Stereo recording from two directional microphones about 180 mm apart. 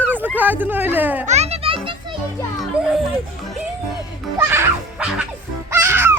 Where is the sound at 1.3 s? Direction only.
35° right (ahead or behind).